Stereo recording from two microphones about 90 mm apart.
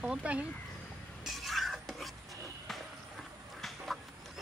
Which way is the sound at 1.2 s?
Centre (ahead or behind).